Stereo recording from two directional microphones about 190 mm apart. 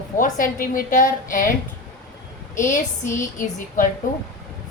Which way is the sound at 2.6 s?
40° left (ahead or behind).